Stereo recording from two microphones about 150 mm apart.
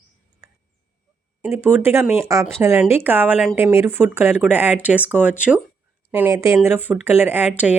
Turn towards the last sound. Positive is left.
turn(degrees=-10)  # may be behind; listen again after turning